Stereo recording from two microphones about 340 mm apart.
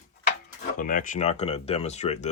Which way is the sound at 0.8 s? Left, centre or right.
Left.